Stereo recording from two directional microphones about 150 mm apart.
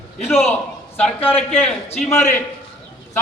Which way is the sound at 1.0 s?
10° left (ahead or behind).